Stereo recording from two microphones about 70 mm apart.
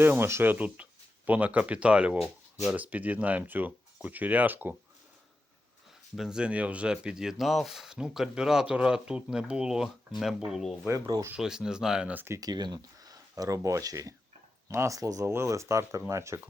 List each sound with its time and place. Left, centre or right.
0.0 s speech: right
6.1 s speech: centre
10.9 s speech: right
11.3 s speech: centre
12.1 s speech: right
12.4 s speech: right
15.3 s speech: right